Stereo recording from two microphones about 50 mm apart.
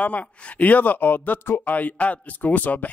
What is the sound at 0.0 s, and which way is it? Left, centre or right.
Speech, left.